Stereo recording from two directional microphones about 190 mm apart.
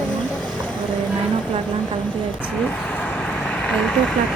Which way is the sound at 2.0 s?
5° left (ahead or behind).